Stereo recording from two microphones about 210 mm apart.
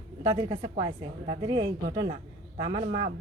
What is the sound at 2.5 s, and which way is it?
Speech, 25° right (ahead or behind).